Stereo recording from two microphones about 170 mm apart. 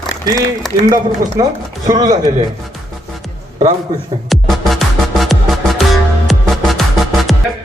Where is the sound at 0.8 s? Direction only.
20° right (ahead or behind).